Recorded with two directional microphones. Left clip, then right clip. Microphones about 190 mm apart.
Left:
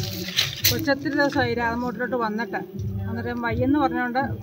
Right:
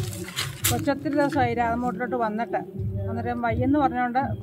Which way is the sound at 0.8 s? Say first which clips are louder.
Left 2 dB; 35° right (ahead or behind).